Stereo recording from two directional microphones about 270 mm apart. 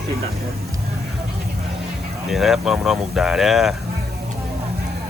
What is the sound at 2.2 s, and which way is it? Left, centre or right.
Speech, centre.